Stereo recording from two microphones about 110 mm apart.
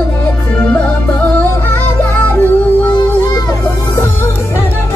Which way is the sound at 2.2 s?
15° left (ahead or behind).